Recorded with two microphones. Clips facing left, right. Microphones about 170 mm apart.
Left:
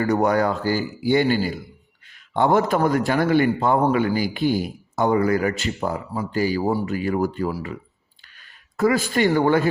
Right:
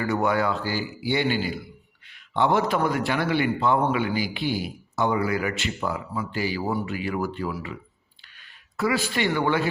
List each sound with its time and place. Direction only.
0.0 s a man's voice: 40° left (ahead or behind)
8.8 s a man's voice: 45° left (ahead or behind)